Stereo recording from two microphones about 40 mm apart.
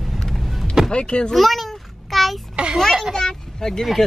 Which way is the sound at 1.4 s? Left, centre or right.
Centre.